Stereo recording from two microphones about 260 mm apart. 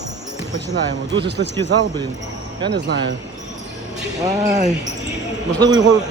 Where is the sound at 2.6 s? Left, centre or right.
Right.